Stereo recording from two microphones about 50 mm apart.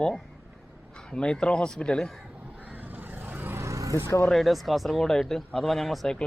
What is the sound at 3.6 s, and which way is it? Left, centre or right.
Vehicle, right.